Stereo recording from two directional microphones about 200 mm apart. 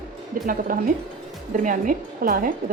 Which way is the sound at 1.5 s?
40° right (ahead or behind).